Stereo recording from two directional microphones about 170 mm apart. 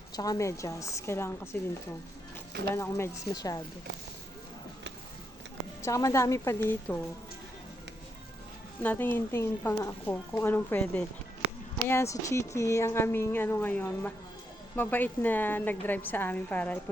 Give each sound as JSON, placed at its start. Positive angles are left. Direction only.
{"t": 0.2, "sound": "a woman's voice", "side_deg": 20}
{"t": 2.7, "sound": "speech", "side_deg": 15}
{"t": 5.8, "sound": "a woman's voice", "side_deg": 20}
{"t": 8.8, "sound": "a woman's voice", "side_deg": 10}